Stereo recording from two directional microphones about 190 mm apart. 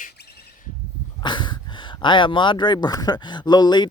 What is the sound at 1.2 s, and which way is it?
Speech, 25° left (ahead or behind).